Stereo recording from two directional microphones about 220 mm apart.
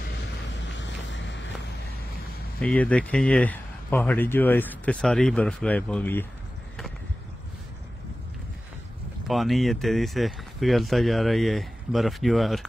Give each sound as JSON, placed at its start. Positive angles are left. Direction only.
{"t": 0.2, "sound": "a sound", "side_deg": 55}
{"t": 2.6, "sound": "speech", "side_deg": 5}
{"t": 9.3, "sound": "speech", "side_deg": 0}